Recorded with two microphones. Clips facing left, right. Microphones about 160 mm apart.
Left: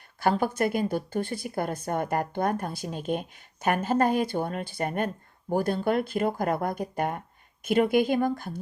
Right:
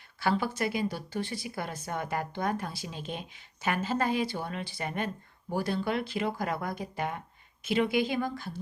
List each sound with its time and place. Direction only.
0.2 s a woman's voice: 50° left (ahead or behind)